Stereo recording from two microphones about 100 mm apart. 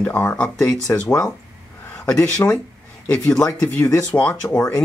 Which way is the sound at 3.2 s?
10° left (ahead or behind).